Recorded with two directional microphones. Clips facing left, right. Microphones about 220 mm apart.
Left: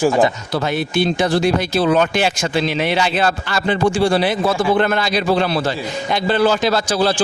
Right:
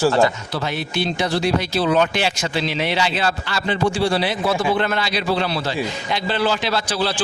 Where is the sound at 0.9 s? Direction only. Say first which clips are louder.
Left 5 dB; 50° left (ahead or behind).